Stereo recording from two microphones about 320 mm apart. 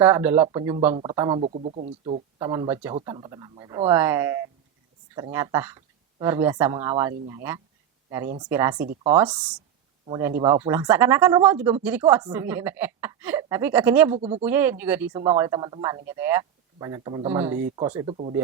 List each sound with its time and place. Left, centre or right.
0.0 s speech: centre
14.2 s speech: centre
14.4 s speech: centre